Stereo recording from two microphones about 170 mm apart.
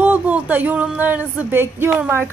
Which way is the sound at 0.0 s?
10° right (ahead or behind).